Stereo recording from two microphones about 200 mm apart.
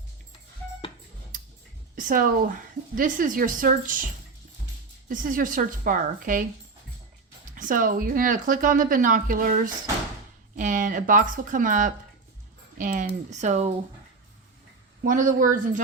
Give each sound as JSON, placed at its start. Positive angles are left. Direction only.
{"t": 2.0, "sound": "a woman's voice", "side_deg": -45}
{"t": 5.0, "sound": "a woman's voice", "side_deg": -40}
{"t": 7.5, "sound": "speech", "side_deg": -40}
{"t": 15.0, "sound": "speech", "side_deg": -40}